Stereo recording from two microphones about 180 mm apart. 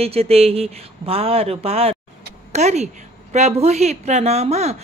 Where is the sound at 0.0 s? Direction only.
35° right (ahead or behind).